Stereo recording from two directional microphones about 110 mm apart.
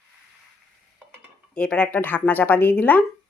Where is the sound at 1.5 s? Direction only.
10° left (ahead or behind).